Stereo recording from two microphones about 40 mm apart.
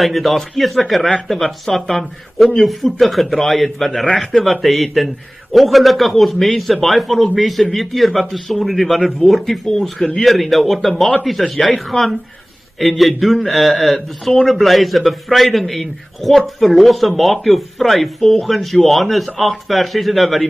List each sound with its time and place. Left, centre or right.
0.0 s speech: centre